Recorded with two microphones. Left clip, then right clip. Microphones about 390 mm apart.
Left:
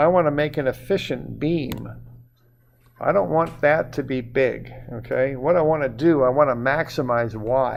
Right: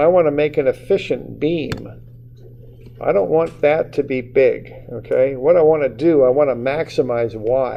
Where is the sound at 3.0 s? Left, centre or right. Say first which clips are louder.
Right 4 dB; left.